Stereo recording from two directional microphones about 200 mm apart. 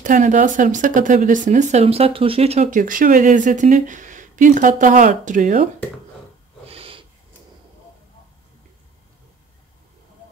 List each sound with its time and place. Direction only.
0.0 s speech: 40° right (ahead or behind)
6.7 s snort: 25° right (ahead or behind)